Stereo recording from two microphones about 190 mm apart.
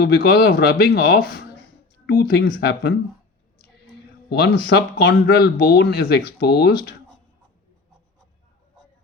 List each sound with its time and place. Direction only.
0.0 s speech: 55° left (ahead or behind)
4.3 s speech: 60° left (ahead or behind)